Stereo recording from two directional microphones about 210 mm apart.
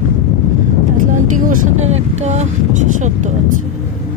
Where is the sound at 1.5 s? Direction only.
30° right (ahead or behind).